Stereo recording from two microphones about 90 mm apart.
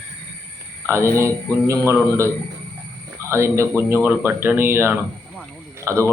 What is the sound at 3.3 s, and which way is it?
A man's voice, 35° right (ahead or behind).